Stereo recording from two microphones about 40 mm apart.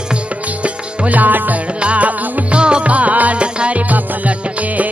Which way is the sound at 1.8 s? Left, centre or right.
Right.